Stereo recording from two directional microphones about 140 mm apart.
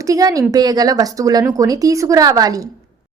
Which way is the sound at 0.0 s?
25° right (ahead or behind).